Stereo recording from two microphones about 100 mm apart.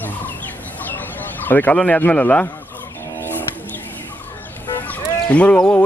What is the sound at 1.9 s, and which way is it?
Speech, 15° left (ahead or behind).